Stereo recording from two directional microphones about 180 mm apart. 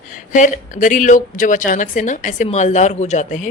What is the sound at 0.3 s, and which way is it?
A woman's voice, 45° left (ahead or behind).